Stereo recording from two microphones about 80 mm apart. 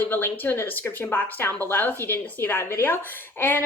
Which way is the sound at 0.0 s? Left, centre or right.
Left.